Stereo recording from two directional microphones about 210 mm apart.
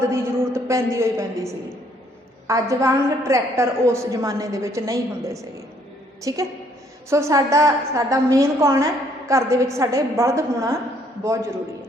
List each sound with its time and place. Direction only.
0.0 s a man's voice: 15° right (ahead or behind)
2.5 s a woman's voice: 15° right (ahead or behind)